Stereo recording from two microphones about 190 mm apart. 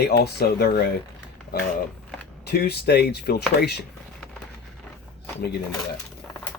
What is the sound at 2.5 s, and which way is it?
Speech, 60° left (ahead or behind).